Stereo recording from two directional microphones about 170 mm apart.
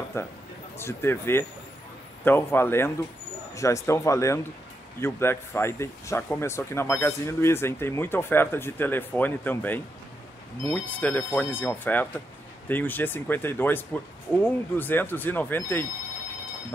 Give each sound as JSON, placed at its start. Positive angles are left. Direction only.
{"t": 0.2, "sound": "speech", "side_deg": 15}